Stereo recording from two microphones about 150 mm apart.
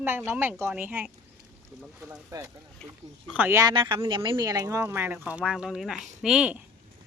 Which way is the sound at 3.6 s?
30° right (ahead or behind).